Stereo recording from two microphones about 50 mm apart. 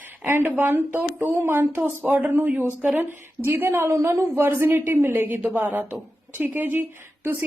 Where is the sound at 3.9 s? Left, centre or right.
Right.